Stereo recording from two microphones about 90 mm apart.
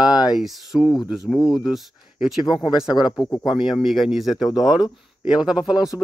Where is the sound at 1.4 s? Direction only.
40° left (ahead or behind).